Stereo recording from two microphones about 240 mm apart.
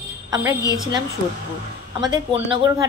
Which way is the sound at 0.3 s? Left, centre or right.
Centre.